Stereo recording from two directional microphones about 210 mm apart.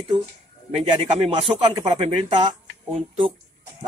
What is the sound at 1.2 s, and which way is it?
Speech, 30° right (ahead or behind).